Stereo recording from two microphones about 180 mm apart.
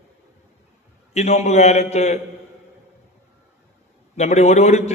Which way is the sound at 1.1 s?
35° left (ahead or behind).